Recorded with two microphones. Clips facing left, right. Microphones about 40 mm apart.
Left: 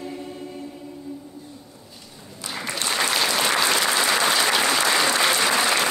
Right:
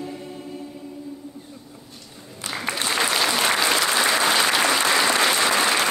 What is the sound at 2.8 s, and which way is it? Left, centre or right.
Applause, centre.